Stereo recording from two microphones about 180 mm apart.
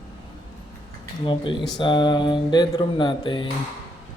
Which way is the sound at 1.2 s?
25° left (ahead or behind).